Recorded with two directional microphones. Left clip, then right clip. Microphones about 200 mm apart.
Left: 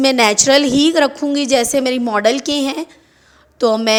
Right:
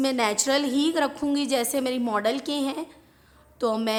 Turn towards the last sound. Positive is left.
turn(degrees=30)  # may be behind; listen again after turning